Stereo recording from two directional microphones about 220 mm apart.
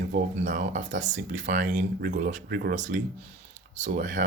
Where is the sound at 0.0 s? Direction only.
40° right (ahead or behind).